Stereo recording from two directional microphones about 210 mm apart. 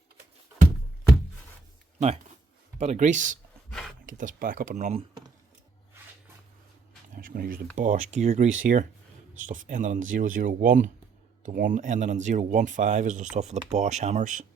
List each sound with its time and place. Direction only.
2.7 s speech: 30° right (ahead or behind)
3.7 s a sound: centre (ahead or behind)
4.0 s speech: 40° right (ahead or behind)
7.2 s speech: 40° right (ahead or behind)